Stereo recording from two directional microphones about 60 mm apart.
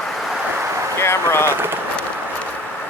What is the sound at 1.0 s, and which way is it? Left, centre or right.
Speech, left.